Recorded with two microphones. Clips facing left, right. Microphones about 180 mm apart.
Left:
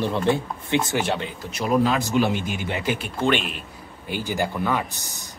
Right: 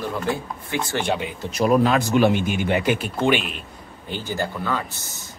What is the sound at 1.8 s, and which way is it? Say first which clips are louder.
Speech: right 3 dB; 60° right (ahead or behind).